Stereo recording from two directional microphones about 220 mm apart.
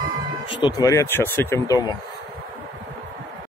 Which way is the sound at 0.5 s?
20° left (ahead or behind).